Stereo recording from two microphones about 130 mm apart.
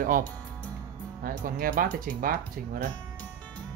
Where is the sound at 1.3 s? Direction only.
90° right.